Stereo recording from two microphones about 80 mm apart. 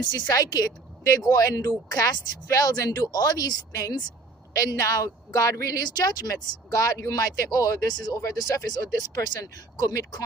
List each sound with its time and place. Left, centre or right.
0.0 s speech: left